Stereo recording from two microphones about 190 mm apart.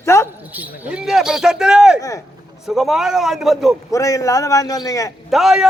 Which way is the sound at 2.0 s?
15° left (ahead or behind).